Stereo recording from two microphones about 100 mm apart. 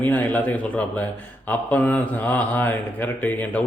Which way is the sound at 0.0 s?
15° left (ahead or behind).